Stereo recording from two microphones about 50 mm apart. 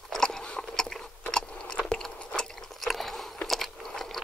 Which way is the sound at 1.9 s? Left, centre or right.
Centre.